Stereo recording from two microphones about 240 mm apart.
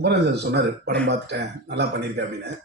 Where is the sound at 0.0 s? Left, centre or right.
Right.